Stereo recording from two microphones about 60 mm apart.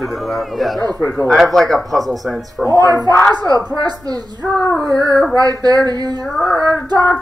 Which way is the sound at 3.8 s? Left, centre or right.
Right.